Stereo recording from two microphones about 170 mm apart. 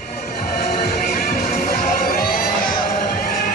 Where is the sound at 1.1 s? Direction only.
60° left (ahead or behind).